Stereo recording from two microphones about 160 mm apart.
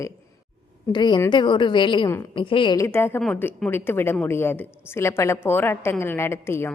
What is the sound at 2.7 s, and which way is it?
A woman's voice, 15° left (ahead or behind).